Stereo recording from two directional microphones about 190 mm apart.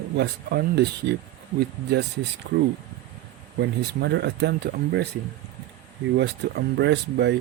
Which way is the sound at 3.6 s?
65° right (ahead or behind).